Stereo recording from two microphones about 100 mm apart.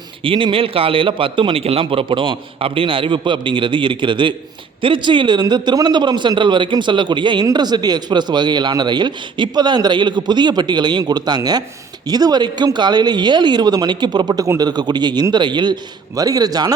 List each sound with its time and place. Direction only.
0.2 s a man's voice: 60° right (ahead or behind); by 16.7 s 40° right (ahead or behind)